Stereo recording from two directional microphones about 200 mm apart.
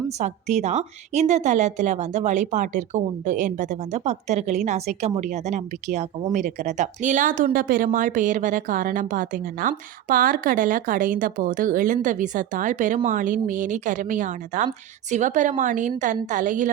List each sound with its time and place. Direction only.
0.2 s a woman's voice: 35° right (ahead or behind)